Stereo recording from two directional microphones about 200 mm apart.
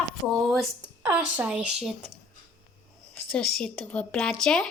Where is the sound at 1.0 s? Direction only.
5° right (ahead or behind).